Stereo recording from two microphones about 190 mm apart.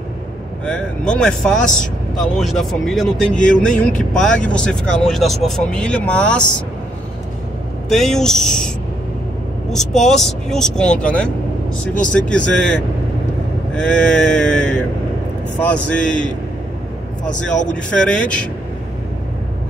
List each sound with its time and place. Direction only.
0.7 s a man's voice: 5° left (ahead or behind)
7.9 s a man's voice: centre (ahead or behind)
17.6 s a man's voice: 5° left (ahead or behind)